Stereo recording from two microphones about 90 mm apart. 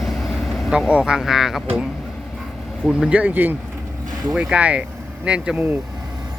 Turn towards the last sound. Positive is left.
turn(degrees=-10)  # may be behind; listen again after turning